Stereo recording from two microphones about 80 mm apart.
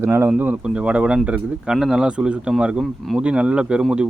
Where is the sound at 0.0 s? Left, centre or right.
Right.